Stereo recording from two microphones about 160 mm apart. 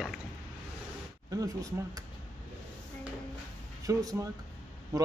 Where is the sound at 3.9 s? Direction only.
20° right (ahead or behind).